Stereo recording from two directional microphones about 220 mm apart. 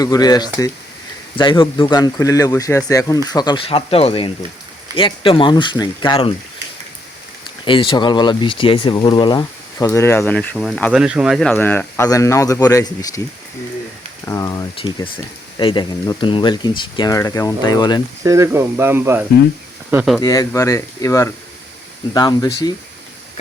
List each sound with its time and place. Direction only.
0.0 s speech: 15° left (ahead or behind)
7.6 s speech: 25° left (ahead or behind)
14.3 s speech: 15° left (ahead or behind)
18.2 s speech: 15° right (ahead or behind)
20.1 s speech: 15° left (ahead or behind)